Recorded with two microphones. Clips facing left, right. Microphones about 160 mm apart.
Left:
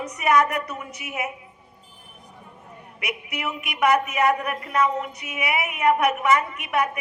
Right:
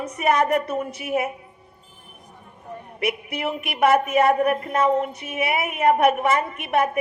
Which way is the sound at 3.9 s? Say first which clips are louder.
Right 4 dB; 50° right (ahead or behind).